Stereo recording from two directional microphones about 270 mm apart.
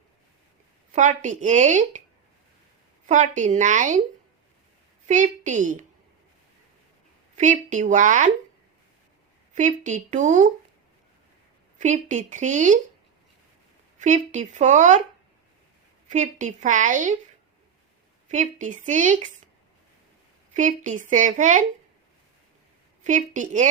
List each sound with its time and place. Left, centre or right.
0.9 s a woman's voice: right
3.1 s a woman's voice: right
5.0 s a woman's voice: right
7.3 s a woman's voice: right
9.6 s a woman's voice: right
11.8 s a woman's voice: right
14.0 s a woman's voice: right
16.0 s a woman's voice: right
18.3 s a woman's voice: right
20.5 s a woman's voice: right
23.0 s a woman's voice: right